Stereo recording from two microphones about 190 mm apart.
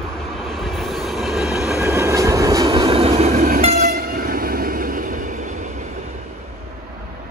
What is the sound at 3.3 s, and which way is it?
Train, 45° right (ahead or behind).